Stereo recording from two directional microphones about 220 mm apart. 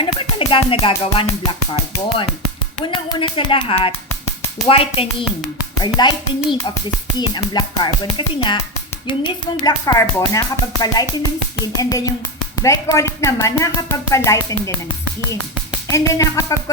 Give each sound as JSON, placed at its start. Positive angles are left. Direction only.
{"t": 0.0, "sound": "music", "side_deg": 25}
{"t": 2.8, "sound": "speech", "side_deg": 20}
{"t": 7.2, "sound": "speech", "side_deg": 20}
{"t": 15.9, "sound": "speech", "side_deg": 15}